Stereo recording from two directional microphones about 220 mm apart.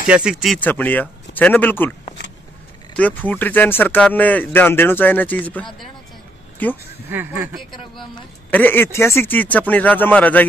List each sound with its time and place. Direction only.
0.0 s speech: 5° right (ahead or behind)
3.0 s speech: 5° left (ahead or behind)
7.1 s speech: 10° right (ahead or behind)
8.5 s speech: 10° left (ahead or behind)